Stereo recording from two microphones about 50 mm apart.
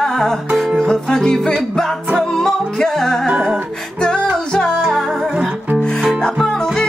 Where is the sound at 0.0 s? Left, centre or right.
Centre.